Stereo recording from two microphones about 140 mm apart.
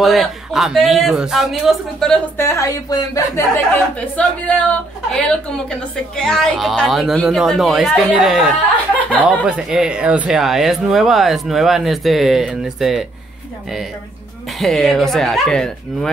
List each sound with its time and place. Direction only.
0.0 s speech: centre (ahead or behind)
2.3 s a woman's voice: 20° left (ahead or behind)
4.2 s a woman's voice: 10° left (ahead or behind)
14.6 s speech: centre (ahead or behind)